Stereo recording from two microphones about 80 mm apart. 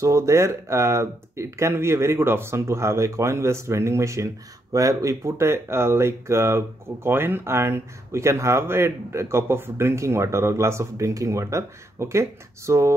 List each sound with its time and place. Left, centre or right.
0.0 s speech: right